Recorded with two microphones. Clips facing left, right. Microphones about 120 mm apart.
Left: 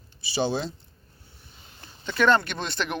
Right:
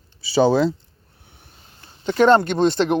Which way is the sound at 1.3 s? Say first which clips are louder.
Right 5 dB; 60° right (ahead or behind).